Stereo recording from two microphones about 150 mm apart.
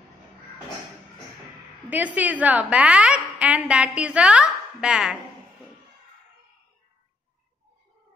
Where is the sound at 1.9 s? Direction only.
10° right (ahead or behind).